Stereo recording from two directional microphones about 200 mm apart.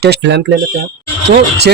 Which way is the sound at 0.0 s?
60° right (ahead or behind).